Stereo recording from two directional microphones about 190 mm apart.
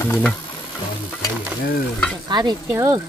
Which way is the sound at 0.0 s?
10° left (ahead or behind).